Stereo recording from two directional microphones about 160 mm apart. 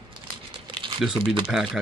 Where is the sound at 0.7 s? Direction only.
30° right (ahead or behind).